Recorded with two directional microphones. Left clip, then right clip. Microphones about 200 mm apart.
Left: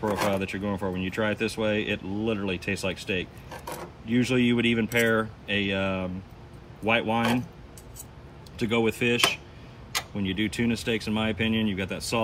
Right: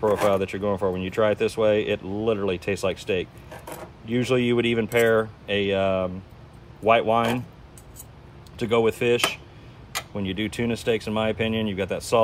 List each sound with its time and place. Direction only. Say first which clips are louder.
0.3 s speech: right 6 dB; 30° right (ahead or behind)
8.5 s speech: right 4 dB; 25° right (ahead or behind)